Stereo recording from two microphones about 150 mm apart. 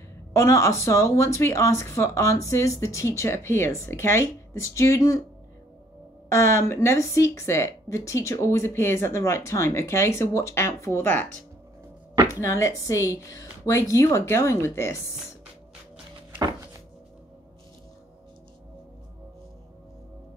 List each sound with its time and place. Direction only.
0.3 s speech: 20° left (ahead or behind)
6.2 s speech: 20° left (ahead or behind)
12.3 s speech: 20° left (ahead or behind)